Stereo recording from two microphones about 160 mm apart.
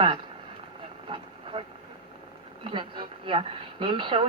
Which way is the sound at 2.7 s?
30° right (ahead or behind).